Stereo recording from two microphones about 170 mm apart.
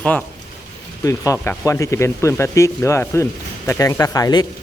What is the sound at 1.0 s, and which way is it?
Speech, 20° left (ahead or behind).